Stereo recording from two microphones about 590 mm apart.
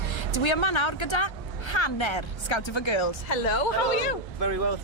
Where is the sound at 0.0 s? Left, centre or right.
Left.